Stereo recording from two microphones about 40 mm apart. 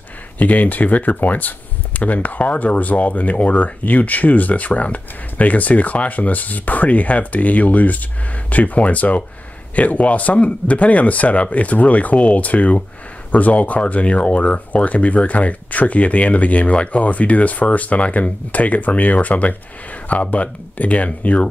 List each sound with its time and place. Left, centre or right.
0.4 s speech: left